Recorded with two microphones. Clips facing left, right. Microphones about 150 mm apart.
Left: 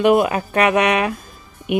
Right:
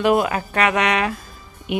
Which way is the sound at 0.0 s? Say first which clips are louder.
Left 3 dB; 20° left (ahead or behind).